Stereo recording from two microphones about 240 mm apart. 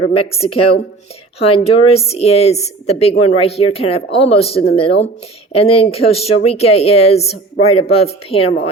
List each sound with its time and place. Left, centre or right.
0.2 s a woman's voice: left